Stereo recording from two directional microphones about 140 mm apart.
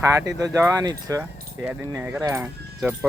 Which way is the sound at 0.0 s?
20° right (ahead or behind).